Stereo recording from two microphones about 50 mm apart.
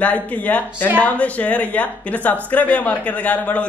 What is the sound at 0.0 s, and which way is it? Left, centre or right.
A man's voice, left.